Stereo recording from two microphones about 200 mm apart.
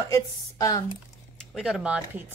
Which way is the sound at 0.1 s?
15° left (ahead or behind).